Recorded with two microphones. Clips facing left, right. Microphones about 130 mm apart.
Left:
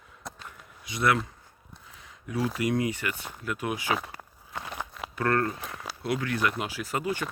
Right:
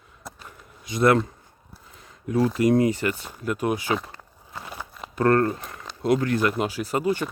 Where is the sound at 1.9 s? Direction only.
45° right (ahead or behind).